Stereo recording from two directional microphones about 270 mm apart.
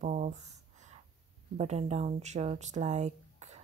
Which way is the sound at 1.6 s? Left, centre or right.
Right.